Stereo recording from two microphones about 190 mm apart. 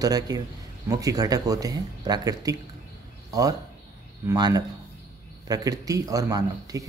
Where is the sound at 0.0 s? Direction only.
20° right (ahead or behind).